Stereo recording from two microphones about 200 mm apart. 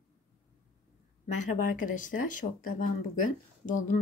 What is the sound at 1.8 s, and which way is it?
Speech, 40° left (ahead or behind).